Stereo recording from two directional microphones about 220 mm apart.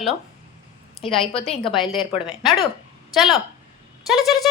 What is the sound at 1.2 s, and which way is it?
Speech, 25° left (ahead or behind).